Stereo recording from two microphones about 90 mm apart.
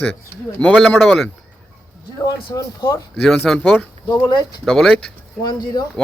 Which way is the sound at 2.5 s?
40° left (ahead or behind).